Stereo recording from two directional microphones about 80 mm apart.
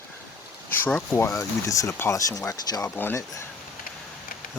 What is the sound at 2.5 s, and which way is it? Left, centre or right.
Speech, left.